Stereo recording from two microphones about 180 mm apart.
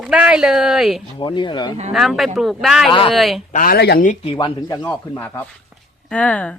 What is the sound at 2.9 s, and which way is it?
Speech, 30° left (ahead or behind).